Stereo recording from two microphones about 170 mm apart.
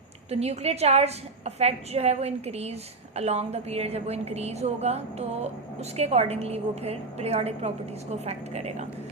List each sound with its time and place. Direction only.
0.3 s a woman's voice: 40° right (ahead or behind)